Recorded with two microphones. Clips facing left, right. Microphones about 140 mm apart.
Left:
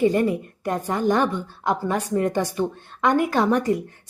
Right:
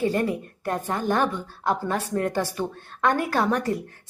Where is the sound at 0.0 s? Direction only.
15° left (ahead or behind).